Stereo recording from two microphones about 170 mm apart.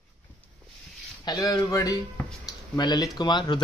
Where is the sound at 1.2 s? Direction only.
20° left (ahead or behind).